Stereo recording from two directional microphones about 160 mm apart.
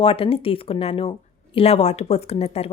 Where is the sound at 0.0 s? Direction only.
35° left (ahead or behind).